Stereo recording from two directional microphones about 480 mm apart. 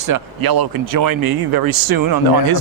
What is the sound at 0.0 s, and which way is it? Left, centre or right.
Speech, right.